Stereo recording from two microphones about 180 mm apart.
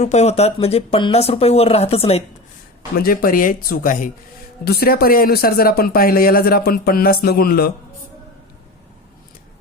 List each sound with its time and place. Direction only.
0.0 s speech: 35° left (ahead or behind)
2.9 s speech: 55° left (ahead or behind)